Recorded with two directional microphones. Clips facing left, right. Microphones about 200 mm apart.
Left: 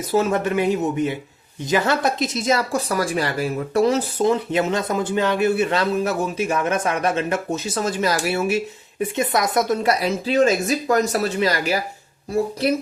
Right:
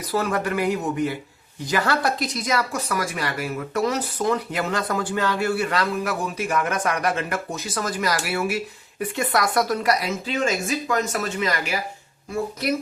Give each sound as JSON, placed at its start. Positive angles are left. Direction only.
{"t": 0.1, "sound": "a woman's voice", "side_deg": 25}
{"t": 10.2, "sound": "a woman's voice", "side_deg": 35}